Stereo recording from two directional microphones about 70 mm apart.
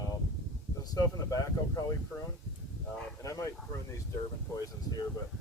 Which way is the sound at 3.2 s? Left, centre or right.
Left.